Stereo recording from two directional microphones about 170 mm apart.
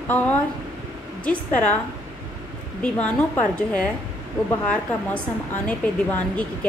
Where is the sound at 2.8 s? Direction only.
10° left (ahead or behind).